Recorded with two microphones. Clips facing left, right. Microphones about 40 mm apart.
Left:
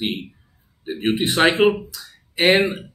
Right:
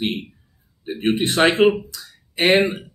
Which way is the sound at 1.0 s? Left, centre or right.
Centre.